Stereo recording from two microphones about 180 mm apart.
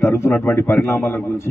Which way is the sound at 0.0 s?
15° left (ahead or behind).